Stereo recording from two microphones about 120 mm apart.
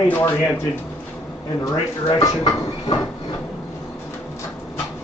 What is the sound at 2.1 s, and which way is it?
Speech, 35° left (ahead or behind).